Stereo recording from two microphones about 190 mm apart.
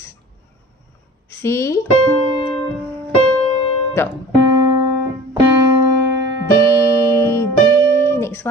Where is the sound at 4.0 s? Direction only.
10° left (ahead or behind).